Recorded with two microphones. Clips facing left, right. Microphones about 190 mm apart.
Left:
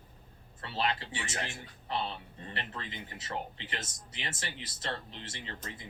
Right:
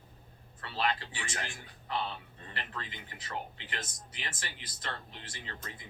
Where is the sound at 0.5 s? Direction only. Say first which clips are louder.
Even; 25° left (ahead or behind).